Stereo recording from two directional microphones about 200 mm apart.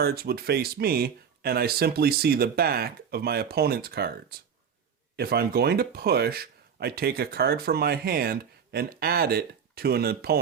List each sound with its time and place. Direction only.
0.0 s speech: 50° right (ahead or behind)
5.1 s speech: 50° right (ahead or behind)